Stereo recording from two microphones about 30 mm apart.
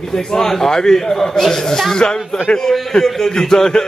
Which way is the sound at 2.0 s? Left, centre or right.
Left.